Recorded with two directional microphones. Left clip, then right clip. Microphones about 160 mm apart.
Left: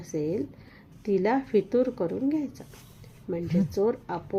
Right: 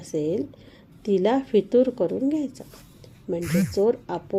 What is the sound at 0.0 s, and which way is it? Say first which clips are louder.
A woman's voice: right 4 dB; 35° right (ahead or behind).